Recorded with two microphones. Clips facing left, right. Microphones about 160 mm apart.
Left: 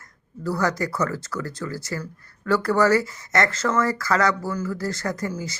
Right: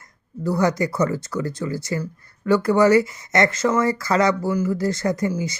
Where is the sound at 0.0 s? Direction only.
20° right (ahead or behind).